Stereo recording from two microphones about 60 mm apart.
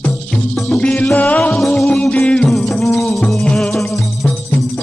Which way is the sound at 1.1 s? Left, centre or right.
Left.